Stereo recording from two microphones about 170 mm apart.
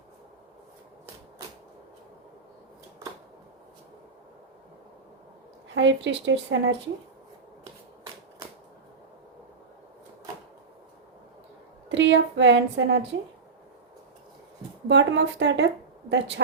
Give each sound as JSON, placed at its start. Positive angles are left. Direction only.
{"t": 5.6, "sound": "speech", "side_deg": -90}
{"t": 11.9, "sound": "a woman's voice", "side_deg": -90}
{"t": 14.8, "sound": "a woman's voice", "side_deg": -90}